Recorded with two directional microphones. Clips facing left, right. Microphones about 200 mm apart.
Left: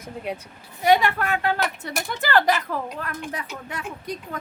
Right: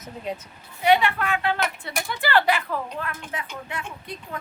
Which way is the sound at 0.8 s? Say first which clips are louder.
Left 1 dB; 40° left (ahead or behind).